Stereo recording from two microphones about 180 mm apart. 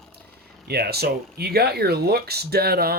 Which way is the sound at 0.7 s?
60° right (ahead or behind).